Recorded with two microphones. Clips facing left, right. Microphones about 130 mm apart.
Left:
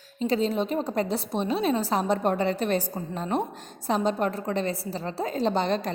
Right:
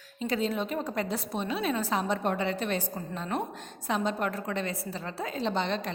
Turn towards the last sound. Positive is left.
turn(degrees=40)  # may be behind; listen again after turning